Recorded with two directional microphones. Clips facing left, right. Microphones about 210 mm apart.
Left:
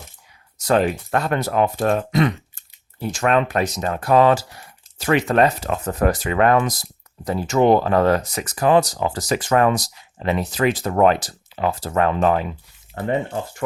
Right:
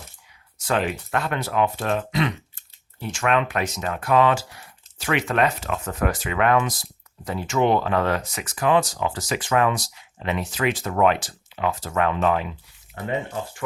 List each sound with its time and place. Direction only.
0.6 s speech: 40° left (ahead or behind)